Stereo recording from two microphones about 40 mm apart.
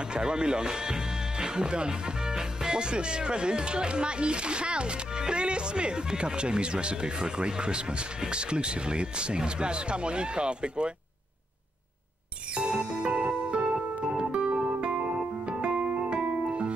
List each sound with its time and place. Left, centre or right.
0.1 s speech: right
13.0 s music: right